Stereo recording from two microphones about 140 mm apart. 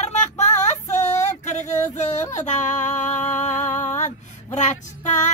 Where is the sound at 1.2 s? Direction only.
60° left (ahead or behind).